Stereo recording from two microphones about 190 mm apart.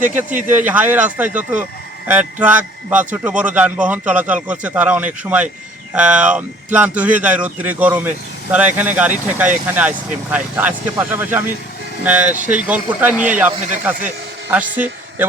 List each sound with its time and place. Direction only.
0.0 s a man's voice: 10° right (ahead or behind)
14.5 s a man's voice: 10° right (ahead or behind)